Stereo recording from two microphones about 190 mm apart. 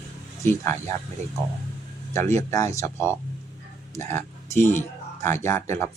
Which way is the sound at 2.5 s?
15° left (ahead or behind).